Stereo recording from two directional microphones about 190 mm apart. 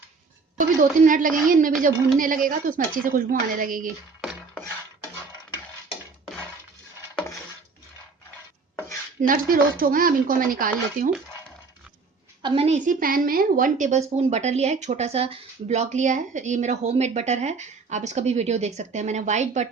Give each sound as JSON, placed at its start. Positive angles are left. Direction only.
{"t": 0.5, "sound": "speech", "side_deg": -45}
{"t": 9.2, "sound": "speech", "side_deg": -45}
{"t": 12.4, "sound": "a woman's voice", "side_deg": -25}